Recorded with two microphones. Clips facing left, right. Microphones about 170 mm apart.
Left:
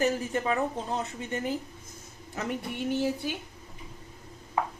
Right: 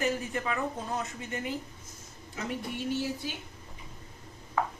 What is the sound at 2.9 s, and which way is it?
Speech, 55° left (ahead or behind).